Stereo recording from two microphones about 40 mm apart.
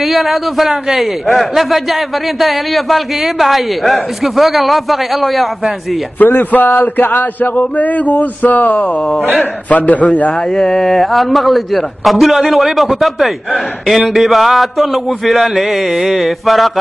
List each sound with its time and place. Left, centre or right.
0.0 s a man's voice: centre
6.1 s a man's voice: left
10.5 s a man's voice: centre